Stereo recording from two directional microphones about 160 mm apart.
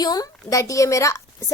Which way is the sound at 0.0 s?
25° left (ahead or behind).